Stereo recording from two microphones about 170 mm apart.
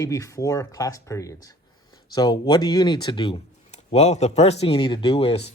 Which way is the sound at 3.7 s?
40° left (ahead or behind).